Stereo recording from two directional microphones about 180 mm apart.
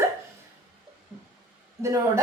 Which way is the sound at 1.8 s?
15° right (ahead or behind).